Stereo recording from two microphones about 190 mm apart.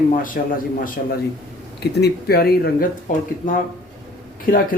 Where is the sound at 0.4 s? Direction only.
55° left (ahead or behind).